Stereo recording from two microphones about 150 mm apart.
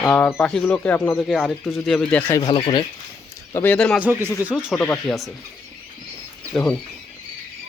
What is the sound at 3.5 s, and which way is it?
Speech, 10° left (ahead or behind).